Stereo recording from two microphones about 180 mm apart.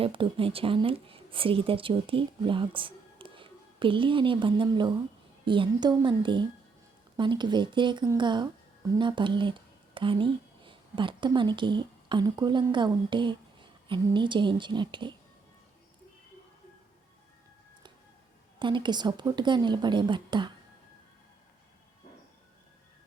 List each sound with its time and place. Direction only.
0.0 s a woman's voice: 30° right (ahead or behind)
18.6 s a woman's voice: 25° right (ahead or behind)